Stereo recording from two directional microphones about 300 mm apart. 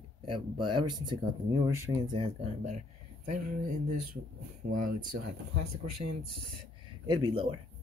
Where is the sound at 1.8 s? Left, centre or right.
Centre.